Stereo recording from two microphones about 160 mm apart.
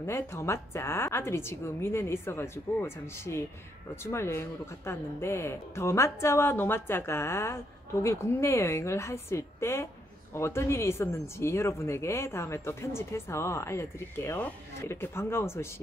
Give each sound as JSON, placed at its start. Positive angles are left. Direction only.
{"t": 0.0, "sound": "speech", "side_deg": 15}